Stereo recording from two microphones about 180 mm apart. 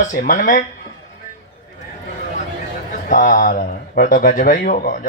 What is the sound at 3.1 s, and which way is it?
Speech, 50° left (ahead or behind).